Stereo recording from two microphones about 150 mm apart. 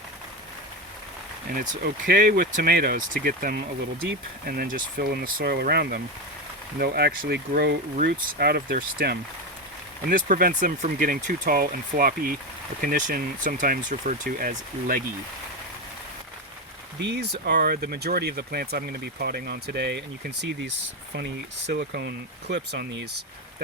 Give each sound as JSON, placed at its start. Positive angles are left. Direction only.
{"t": 1.5, "sound": "speech", "side_deg": -80}
{"t": 10.1, "sound": "speech", "side_deg": -70}
{"t": 12.8, "sound": "speech", "side_deg": -65}
{"t": 17.2, "sound": "speech", "side_deg": -90}
{"t": 21.7, "sound": "speech", "side_deg": -90}